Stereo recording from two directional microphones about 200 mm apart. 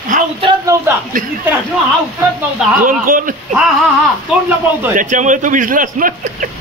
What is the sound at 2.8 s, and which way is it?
Speech, 45° right (ahead or behind).